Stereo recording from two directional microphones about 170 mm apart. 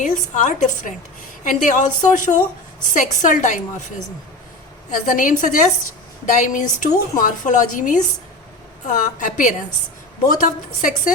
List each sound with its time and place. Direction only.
0.0 s a woman's voice: 45° left (ahead or behind)
4.9 s a woman's voice: 50° left (ahead or behind)